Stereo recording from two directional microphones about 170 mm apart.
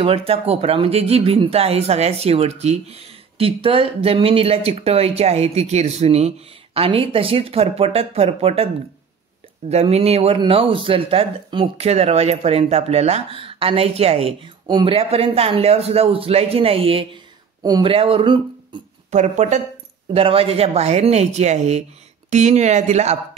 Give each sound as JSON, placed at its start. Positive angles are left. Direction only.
{"t": 0.0, "sound": "speech", "side_deg": -35}
{"t": 9.7, "sound": "speech", "side_deg": -40}
{"t": 19.0, "sound": "speech", "side_deg": -45}
{"t": 20.1, "sound": "speech", "side_deg": -35}